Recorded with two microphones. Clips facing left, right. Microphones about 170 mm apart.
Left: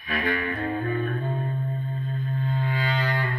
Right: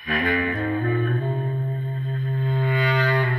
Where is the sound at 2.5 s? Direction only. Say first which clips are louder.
Right 6 dB; 70° right (ahead or behind).